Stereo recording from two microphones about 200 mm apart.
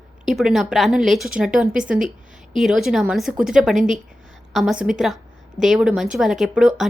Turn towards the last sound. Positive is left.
turn(degrees=0)  # may be behind; listen again after turning